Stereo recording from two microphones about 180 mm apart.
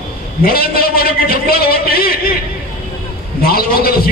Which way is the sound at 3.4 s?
55° left (ahead or behind).